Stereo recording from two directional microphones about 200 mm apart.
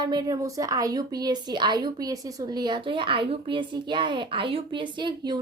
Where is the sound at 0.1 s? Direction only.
20° right (ahead or behind).